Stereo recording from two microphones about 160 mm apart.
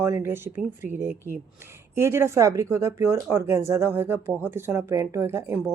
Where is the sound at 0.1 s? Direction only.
15° right (ahead or behind).